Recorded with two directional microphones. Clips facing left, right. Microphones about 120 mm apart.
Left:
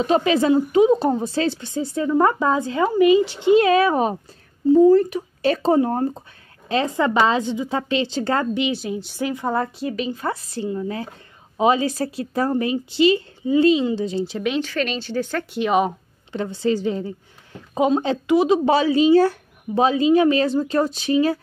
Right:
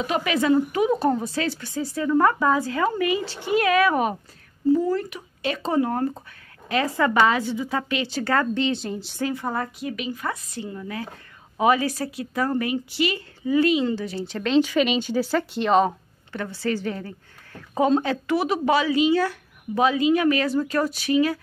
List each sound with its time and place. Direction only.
0.0 s a woman's voice: 30° left (ahead or behind)
8.7 s a woman's voice: 5° left (ahead or behind)
9.2 s a woman's voice: 20° left (ahead or behind)
14.6 s speech: 10° right (ahead or behind); by 15.9 s 5° left (ahead or behind)
16.3 s a woman's voice: 20° left (ahead or behind)
18.7 s a woman's voice: 30° left (ahead or behind)